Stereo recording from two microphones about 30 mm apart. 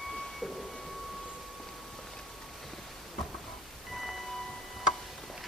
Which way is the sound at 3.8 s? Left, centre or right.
Centre.